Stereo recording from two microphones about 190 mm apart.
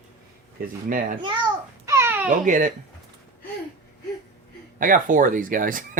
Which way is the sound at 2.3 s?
45° right (ahead or behind).